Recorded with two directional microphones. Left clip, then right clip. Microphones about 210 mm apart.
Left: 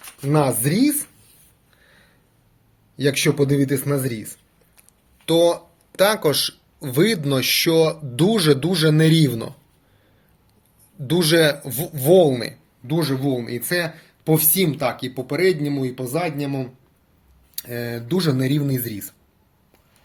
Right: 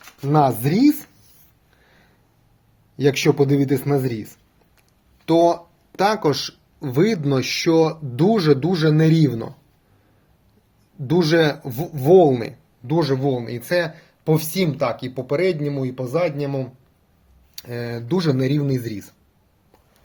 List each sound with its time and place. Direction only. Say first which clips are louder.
0.3 s a man's voice: right 2 dB; 40° right (ahead or behind)
1.8 s a sound: left 2 dB; 45° right (ahead or behind)
2.9 s a man's voice: right 2 dB; 45° right (ahead or behind)
11.0 s a man's voice: left 1 dB; 40° right (ahead or behind)